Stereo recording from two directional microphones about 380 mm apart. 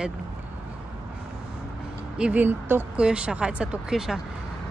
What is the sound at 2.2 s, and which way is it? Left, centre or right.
Speech, centre.